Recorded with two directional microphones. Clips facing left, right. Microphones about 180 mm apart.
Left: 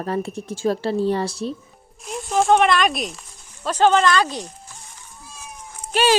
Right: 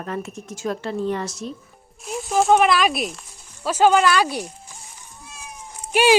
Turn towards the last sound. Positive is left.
turn(degrees=-10)  # may be behind; listen again after turning